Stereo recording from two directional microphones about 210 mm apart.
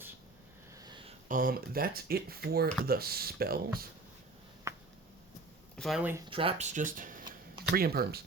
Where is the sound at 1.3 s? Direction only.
45° right (ahead or behind).